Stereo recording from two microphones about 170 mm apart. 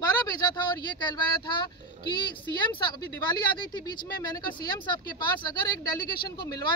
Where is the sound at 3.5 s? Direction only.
25° left (ahead or behind).